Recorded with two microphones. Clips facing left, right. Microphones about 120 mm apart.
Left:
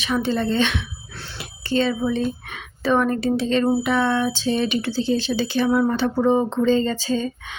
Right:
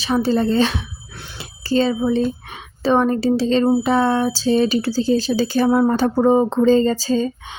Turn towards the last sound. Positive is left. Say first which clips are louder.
# right 5 dB
turn(degrees=-35)  # may be behind; listen again after turning